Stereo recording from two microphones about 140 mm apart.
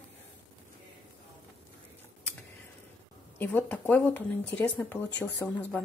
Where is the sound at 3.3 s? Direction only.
15° left (ahead or behind).